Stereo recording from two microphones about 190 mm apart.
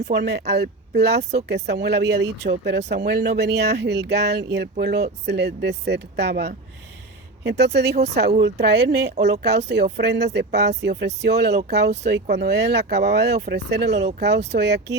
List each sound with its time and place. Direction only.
0.0 s speech: 65° right (ahead or behind)
7.9 s speech: 35° right (ahead or behind)
8.4 s speech: 60° right (ahead or behind)